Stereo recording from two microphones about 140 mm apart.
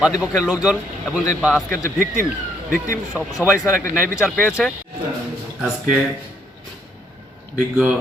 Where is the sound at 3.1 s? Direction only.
10° right (ahead or behind).